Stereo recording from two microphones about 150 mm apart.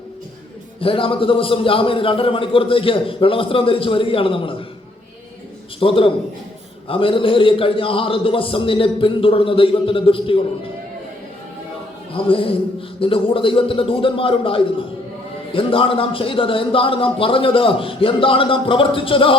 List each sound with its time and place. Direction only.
0.8 s a man's voice: 35° left (ahead or behind)
5.8 s a man's voice: 35° left (ahead or behind)
12.1 s a man's voice: 35° left (ahead or behind)